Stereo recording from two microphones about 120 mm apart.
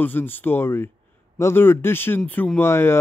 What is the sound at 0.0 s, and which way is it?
Speech, 15° left (ahead or behind).